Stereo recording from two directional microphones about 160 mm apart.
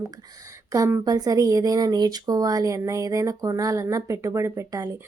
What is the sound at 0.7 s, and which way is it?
Speech, 20° right (ahead or behind).